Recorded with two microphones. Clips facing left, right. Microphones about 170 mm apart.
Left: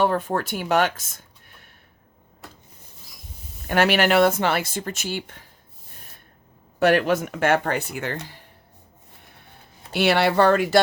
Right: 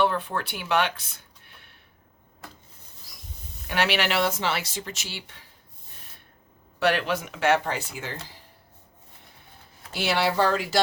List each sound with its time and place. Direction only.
0.0 s speech: 45° left (ahead or behind)
3.7 s speech: 50° left (ahead or behind)
6.7 s speech: 45° left (ahead or behind); by 8.1 s 60° left (ahead or behind)
9.9 s speech: 65° left (ahead or behind)